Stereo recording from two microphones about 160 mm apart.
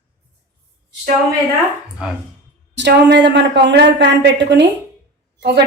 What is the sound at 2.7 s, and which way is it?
A woman's voice, 90° right.